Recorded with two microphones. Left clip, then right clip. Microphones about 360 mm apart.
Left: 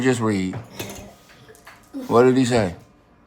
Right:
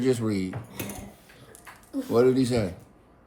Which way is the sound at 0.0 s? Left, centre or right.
Centre.